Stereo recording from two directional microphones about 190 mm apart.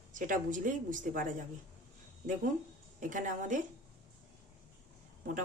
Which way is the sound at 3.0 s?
45° right (ahead or behind).